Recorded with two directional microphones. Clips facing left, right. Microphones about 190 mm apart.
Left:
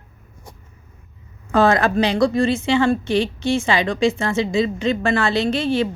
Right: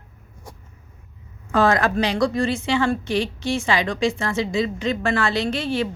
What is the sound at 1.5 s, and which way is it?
A woman's voice, 25° left (ahead or behind).